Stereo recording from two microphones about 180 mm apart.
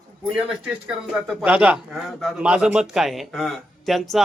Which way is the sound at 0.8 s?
5° right (ahead or behind).